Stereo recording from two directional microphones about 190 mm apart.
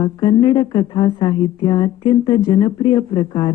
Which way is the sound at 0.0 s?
25° left (ahead or behind).